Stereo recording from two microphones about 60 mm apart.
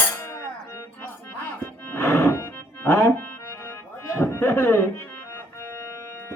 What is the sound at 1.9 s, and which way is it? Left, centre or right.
Music, left.